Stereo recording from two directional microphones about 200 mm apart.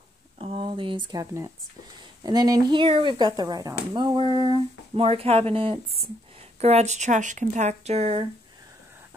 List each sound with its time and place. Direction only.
0.4 s speech: 30° right (ahead or behind)